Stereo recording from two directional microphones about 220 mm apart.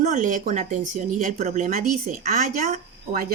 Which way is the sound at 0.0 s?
35° right (ahead or behind).